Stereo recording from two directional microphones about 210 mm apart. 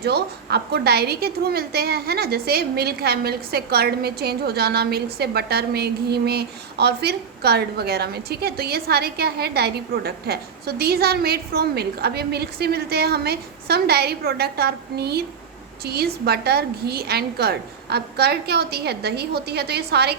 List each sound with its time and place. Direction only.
0.0 s a woman's voice: 50° right (ahead or behind)